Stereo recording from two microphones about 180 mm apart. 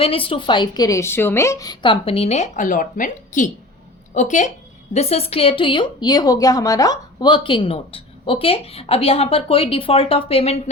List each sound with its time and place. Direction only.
0.0 s a woman's voice: 30° left (ahead or behind)